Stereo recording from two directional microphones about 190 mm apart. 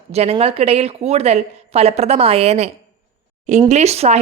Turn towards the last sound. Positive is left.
turn(degrees=-35)  # may be behind; listen again after turning